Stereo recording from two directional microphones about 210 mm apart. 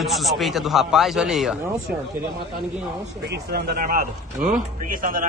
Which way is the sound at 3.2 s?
50° right (ahead or behind).